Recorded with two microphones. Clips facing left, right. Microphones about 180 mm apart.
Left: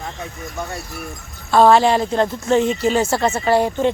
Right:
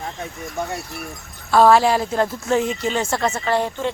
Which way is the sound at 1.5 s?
Centre (ahead or behind).